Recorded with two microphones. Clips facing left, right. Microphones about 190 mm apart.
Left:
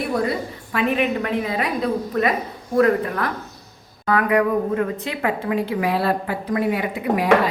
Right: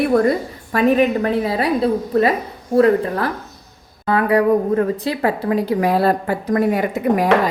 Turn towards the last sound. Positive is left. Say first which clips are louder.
# right 4 dB
turn(degrees=-45)  # may be behind; listen again after turning